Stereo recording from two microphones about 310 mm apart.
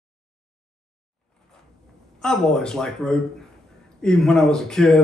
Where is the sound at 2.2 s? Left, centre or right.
Centre.